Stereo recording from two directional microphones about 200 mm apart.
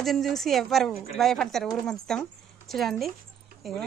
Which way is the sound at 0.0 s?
Centre (ahead or behind).